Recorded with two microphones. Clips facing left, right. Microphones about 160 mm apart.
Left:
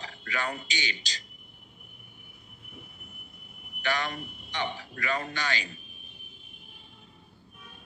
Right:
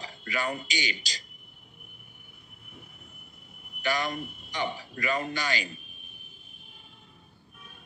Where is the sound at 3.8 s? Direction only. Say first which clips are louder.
Right 2 dB; 10° right (ahead or behind).